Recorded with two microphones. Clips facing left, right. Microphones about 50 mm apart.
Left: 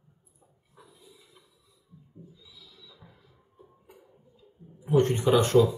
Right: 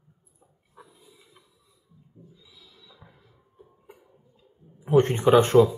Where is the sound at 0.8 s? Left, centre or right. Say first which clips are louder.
Right 4 dB; right.